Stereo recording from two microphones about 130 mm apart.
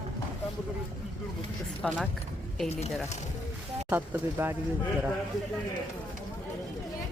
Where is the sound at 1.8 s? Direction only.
Centre (ahead or behind).